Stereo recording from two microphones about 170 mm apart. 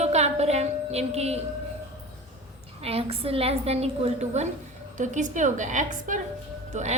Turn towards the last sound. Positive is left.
turn(degrees=-40)  # may be behind; listen again after turning